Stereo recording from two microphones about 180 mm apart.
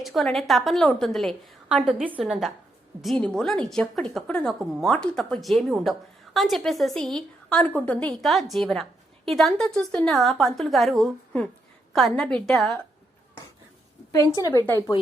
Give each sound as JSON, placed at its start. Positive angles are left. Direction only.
{"t": 0.0, "sound": "a woman's voice", "side_deg": 0}
{"t": 14.1, "sound": "a woman's voice", "side_deg": 20}